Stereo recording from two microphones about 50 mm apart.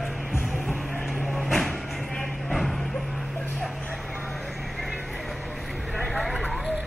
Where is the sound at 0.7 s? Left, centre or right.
Centre.